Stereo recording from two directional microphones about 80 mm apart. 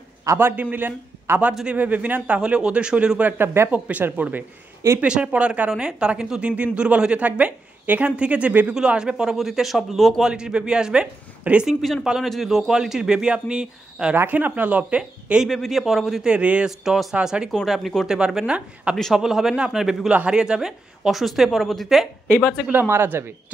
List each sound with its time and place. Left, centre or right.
0.4 s a woman's voice: right
1.5 s speech: centre
1.8 s speech: centre
3.7 s a woman's voice: centre
10.3 s speech: centre
14.1 s a woman's voice: right
15.4 s a woman's voice: centre
16.3 s a woman's voice: centre
22.7 s speech: right